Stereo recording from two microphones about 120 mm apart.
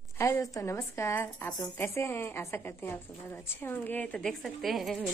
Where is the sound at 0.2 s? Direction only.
20° left (ahead or behind).